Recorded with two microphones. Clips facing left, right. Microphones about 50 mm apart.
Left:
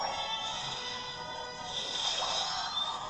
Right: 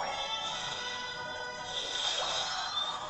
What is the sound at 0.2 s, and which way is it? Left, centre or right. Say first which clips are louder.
Music: even; centre.